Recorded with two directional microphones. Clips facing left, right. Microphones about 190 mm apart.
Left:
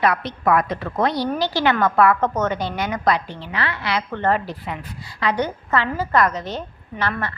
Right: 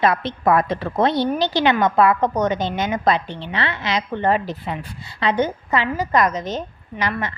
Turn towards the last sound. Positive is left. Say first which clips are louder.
# even
turn(degrees=-15)  # may be behind; listen again after turning